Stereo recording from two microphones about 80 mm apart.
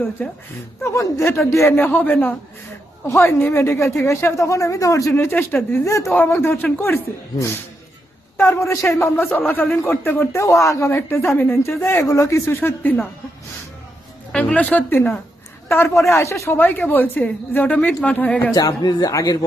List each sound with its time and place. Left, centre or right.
0.9 s a woman's voice: left
3.1 s speech: left
5.1 s a woman's voice: left
5.8 s speech: left
6.1 s a woman's voice: left
8.4 s a woman's voice: left
12.0 s speech: left
14.3 s a woman's voice: centre
18.5 s speech: left